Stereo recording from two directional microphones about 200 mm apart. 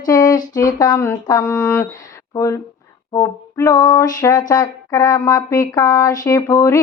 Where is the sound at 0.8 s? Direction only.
15° left (ahead or behind).